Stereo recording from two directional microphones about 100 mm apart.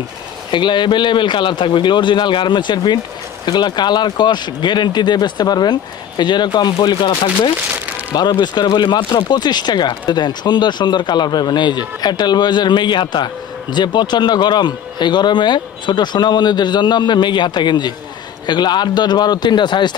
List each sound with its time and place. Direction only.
0.5 s a man's voice: 50° left (ahead or behind)